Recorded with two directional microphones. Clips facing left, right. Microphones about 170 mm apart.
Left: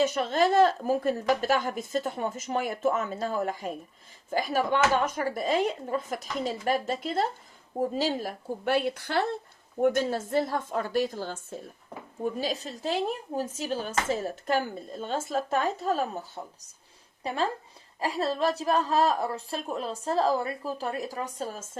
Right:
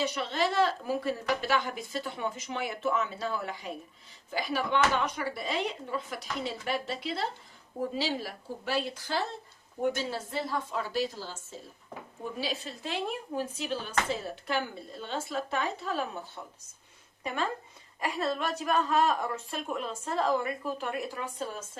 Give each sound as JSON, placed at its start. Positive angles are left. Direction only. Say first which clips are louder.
{"t": 0.0, "sound": "a woman's voice", "louder": "left 6 dB", "side_deg": 45}
{"t": 9.9, "sound": "speech", "louder": "left 8 dB", "side_deg": 50}
{"t": 12.2, "sound": "a woman's voice", "louder": "left 5 dB", "side_deg": 45}